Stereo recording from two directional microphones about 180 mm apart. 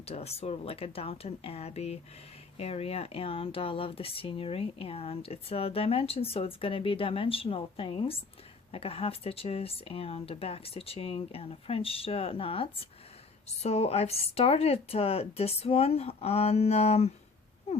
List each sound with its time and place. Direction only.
0.0 s speech: 35° left (ahead or behind)